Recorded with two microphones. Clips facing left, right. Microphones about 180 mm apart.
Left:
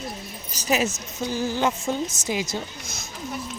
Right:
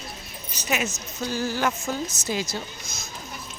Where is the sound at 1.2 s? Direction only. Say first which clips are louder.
Left 2 dB; 20° left (ahead or behind).